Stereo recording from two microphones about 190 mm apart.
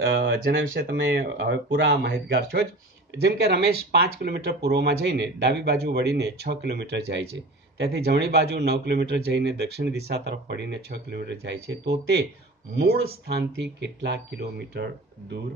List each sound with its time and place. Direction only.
0.0 s speech: 85° right
0.9 s speech: 65° right (ahead or behind)